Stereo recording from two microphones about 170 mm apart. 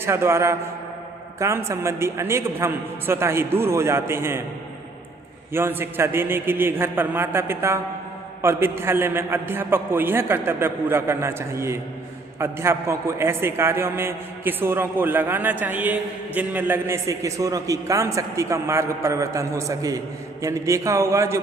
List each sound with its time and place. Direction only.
0.0 s a man's voice: 15° right (ahead or behind)
5.5 s a man's voice: 15° right (ahead or behind)